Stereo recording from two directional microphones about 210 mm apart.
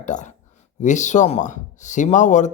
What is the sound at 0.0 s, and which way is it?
Speech, 35° left (ahead or behind).